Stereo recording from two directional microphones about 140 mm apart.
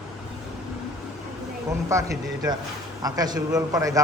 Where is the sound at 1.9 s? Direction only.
20° right (ahead or behind).